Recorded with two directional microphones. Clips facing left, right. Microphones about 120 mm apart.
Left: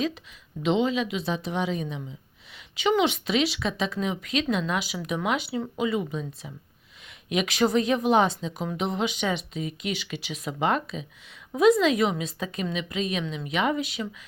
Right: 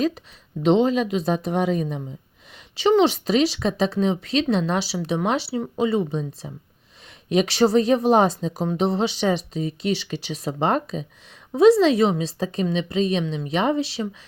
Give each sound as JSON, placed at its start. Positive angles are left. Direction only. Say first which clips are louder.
{"t": 0.6, "sound": "a woman's voice", "louder": "right 6 dB", "side_deg": -35}